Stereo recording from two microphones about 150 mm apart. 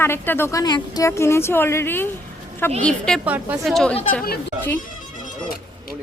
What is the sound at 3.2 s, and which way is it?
Speech, 10° right (ahead or behind).